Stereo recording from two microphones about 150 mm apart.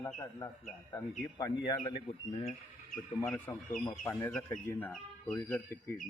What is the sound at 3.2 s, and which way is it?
Speech, 10° left (ahead or behind).